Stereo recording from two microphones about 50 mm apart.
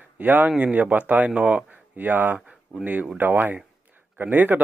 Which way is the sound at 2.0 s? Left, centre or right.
Right.